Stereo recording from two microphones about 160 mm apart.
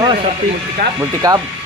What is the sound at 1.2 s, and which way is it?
Speech, 25° right (ahead or behind).